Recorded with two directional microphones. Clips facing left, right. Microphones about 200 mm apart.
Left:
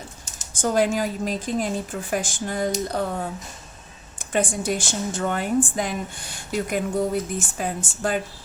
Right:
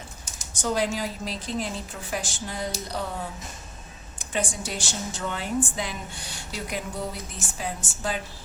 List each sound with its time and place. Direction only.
0.6 s a woman's voice: 50° left (ahead or behind)
4.3 s a woman's voice: 50° left (ahead or behind)